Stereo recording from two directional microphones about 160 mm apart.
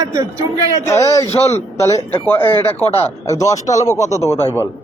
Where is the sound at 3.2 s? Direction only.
20° left (ahead or behind).